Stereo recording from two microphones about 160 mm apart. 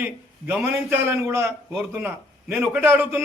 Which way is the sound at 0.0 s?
10° right (ahead or behind).